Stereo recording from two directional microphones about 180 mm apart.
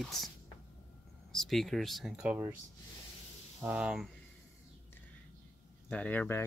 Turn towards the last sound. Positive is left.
turn(degrees=10)  # may be behind; listen again after turning